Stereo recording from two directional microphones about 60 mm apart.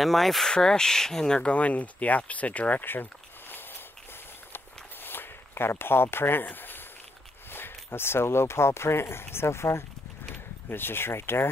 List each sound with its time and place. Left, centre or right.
0.0 s speech: centre; by 3.6 s left
5.0 s a sound: left
7.5 s speech: left